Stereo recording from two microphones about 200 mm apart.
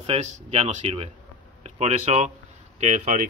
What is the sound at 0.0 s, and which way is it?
Speech, 30° right (ahead or behind).